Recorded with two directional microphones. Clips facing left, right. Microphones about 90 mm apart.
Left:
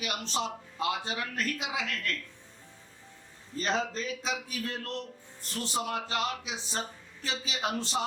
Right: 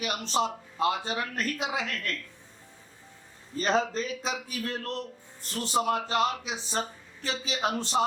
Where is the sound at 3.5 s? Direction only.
45° right (ahead or behind).